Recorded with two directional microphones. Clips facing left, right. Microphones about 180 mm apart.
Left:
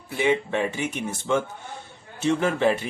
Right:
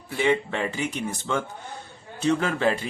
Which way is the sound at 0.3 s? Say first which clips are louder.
Left 1 dB; 15° left (ahead or behind).